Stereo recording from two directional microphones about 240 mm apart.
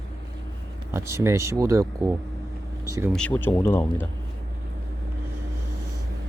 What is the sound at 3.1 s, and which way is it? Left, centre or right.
Speech, centre.